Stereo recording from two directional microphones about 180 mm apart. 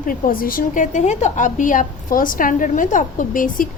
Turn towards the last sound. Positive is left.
turn(degrees=50)  # may be behind; listen again after turning